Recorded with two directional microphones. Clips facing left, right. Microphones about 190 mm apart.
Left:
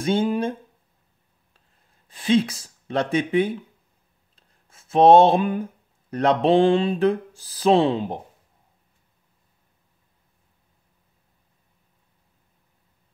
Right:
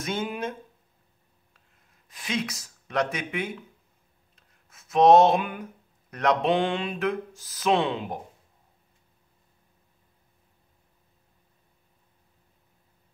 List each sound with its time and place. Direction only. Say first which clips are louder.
0.0 s speech: left 8 dB; 30° left (ahead or behind)
2.0 s speech: left 11 dB; 30° left (ahead or behind)